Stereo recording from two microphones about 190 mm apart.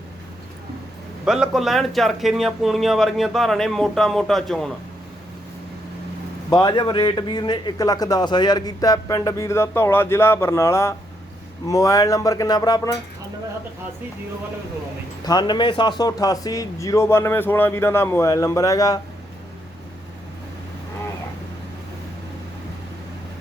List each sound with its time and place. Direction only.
1.2 s speech: 5° right (ahead or behind)
6.5 s a man's voice: 20° left (ahead or behind)
15.2 s speech: 20° left (ahead or behind)